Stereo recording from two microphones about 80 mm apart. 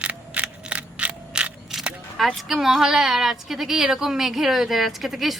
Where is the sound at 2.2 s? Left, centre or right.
Centre.